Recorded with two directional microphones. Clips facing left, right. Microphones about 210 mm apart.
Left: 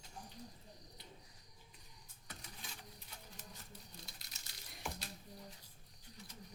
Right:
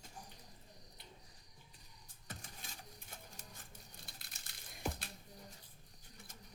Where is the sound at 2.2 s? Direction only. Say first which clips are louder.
Right 2 dB; 50° right (ahead or behind).